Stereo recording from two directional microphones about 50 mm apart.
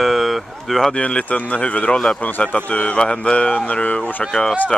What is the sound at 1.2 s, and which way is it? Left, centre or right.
Speech, left.